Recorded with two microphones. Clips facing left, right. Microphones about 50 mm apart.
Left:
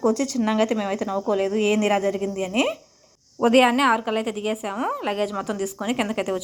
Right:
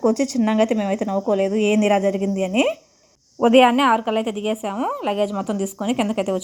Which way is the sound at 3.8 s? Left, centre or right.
Centre.